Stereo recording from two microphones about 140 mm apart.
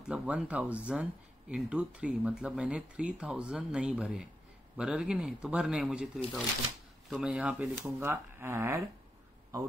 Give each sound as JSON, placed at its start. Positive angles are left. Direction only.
{"t": 0.0, "sound": "speech", "side_deg": -5}